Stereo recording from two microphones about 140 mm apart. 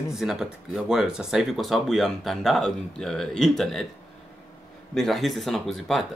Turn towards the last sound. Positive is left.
turn(degrees=0)  # may be behind; listen again after turning